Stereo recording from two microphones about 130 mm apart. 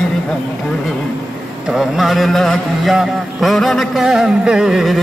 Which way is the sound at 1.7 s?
Centre (ahead or behind).